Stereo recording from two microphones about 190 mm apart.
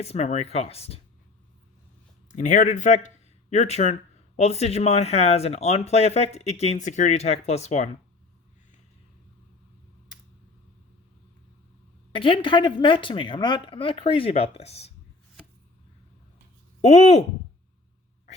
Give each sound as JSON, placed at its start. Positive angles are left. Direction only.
{"t": 0.0, "sound": "speech", "side_deg": 35}
{"t": 2.3, "sound": "speech", "side_deg": 40}
{"t": 12.1, "sound": "a woman's voice", "side_deg": 25}
{"t": 16.8, "sound": "speech", "side_deg": 35}